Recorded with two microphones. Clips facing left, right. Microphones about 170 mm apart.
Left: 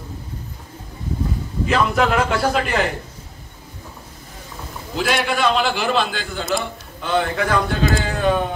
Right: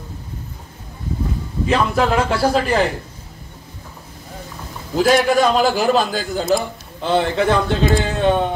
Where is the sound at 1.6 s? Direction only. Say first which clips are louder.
Right 1 dB; 30° right (ahead or behind).